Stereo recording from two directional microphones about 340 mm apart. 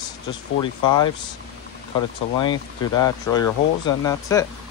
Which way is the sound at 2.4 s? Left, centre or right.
Centre.